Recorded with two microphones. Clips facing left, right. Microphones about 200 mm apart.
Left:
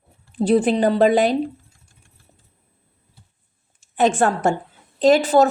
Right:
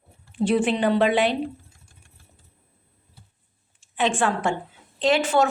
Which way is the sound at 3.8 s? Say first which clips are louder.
Left 6 dB; 40° left (ahead or behind).